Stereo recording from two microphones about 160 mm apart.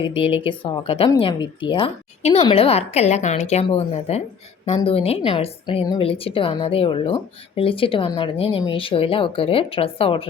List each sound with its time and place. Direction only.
0.0 s speech: 35° left (ahead or behind)